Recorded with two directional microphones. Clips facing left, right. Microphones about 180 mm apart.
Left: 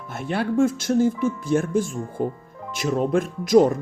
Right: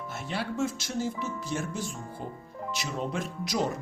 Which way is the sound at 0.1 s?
55° left (ahead or behind).